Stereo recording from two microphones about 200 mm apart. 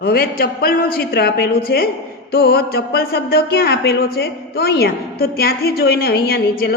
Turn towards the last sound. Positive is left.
turn(degrees=50)  # may be behind; listen again after turning